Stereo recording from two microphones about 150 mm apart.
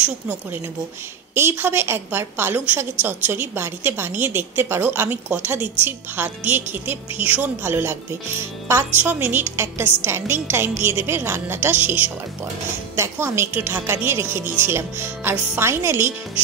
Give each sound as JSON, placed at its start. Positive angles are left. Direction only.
{"t": 0.0, "sound": "a woman's voice", "side_deg": -10}